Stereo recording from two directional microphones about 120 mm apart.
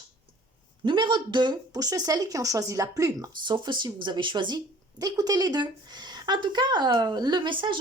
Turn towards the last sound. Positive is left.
turn(degrees=-40)  # may be behind; listen again after turning